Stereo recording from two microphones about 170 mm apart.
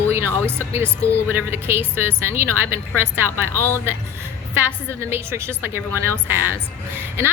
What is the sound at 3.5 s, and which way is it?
Speech, 15° left (ahead or behind).